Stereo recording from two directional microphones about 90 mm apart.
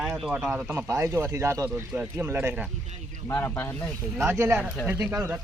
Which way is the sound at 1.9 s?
20° right (ahead or behind).